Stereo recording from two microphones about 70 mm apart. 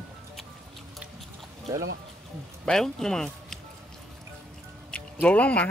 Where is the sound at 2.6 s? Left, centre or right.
Centre.